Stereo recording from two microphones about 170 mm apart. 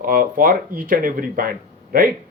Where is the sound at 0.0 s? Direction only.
55° right (ahead or behind).